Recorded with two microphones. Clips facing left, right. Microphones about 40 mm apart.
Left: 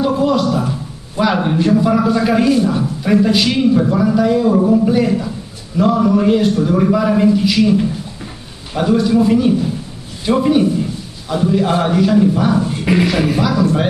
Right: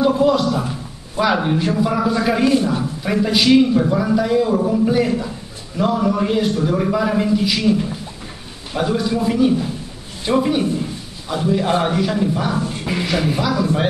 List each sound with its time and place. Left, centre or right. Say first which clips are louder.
0.2 s a man's voice: left 1 dB; centre
2.4 s a man's voice: left 2 dB; centre
8.7 s a man's voice: left 6 dB; centre
12.9 s speech: left 10 dB; left
13.4 s a man's voice: left 4 dB; centre